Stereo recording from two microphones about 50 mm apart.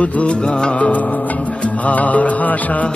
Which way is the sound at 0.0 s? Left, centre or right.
Left.